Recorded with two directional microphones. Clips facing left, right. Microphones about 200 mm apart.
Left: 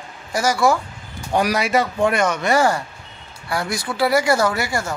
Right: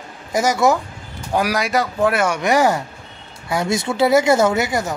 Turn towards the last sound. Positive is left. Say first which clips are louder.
# right 3 dB
turn(degrees=-20)  # may be behind; listen again after turning